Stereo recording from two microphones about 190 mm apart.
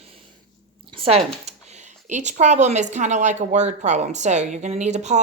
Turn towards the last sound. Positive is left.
turn(degrees=-35)  # may be behind; listen again after turning